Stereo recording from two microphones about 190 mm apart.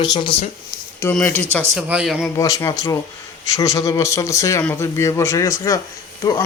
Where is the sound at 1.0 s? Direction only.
10° left (ahead or behind).